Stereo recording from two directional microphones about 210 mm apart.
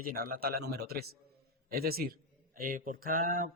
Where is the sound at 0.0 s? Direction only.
45° right (ahead or behind).